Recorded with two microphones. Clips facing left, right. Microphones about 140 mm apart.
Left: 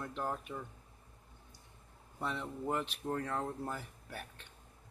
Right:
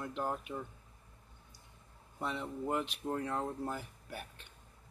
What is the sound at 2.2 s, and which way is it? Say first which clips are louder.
Speech: right 1 dB; 5° right (ahead or behind).